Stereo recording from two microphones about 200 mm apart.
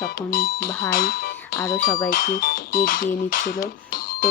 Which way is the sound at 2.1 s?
45° left (ahead or behind).